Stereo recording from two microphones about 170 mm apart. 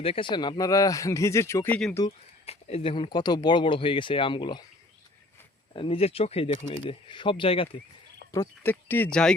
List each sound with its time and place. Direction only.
0.0 s speech: 30° left (ahead or behind); by 2.0 s 10° left (ahead or behind)
2.0 s speech: 35° left (ahead or behind)
5.7 s speech: 30° left (ahead or behind)
8.3 s speech: 15° left (ahead or behind)